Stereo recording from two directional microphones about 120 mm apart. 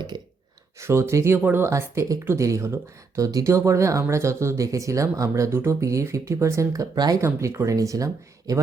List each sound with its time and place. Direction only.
0.8 s speech: 20° right (ahead or behind)